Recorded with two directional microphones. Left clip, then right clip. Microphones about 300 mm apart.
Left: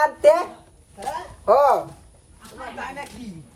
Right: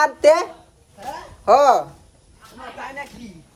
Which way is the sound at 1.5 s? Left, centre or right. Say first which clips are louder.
Right 3 dB; right.